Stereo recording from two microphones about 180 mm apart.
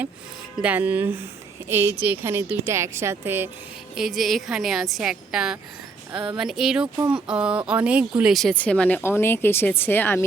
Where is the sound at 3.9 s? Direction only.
Centre (ahead or behind).